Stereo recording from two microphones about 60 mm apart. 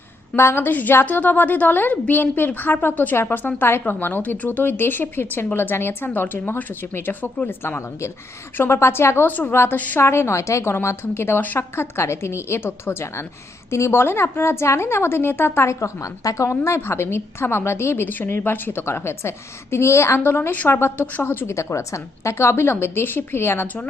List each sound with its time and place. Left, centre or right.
0.3 s a woman's voice: left
8.5 s a woman's voice: left
9.2 s a woman's voice: left
10.0 s a woman's voice: left
16.6 s a woman's voice: left
21.4 s a woman's voice: left